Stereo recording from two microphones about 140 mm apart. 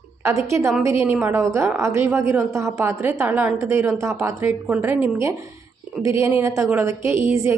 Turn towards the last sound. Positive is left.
turn(degrees=-20)  # may be behind; listen again after turning